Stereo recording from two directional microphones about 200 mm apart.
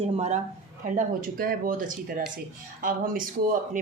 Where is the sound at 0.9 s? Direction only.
45° right (ahead or behind).